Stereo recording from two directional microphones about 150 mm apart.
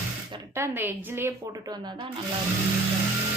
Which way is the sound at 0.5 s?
15° right (ahead or behind).